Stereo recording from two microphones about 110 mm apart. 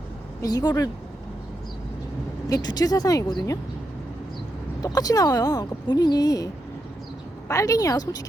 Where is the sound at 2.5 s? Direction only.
40° left (ahead or behind).